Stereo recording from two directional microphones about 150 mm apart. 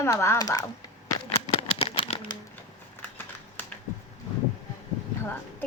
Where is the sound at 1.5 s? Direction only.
40° left (ahead or behind).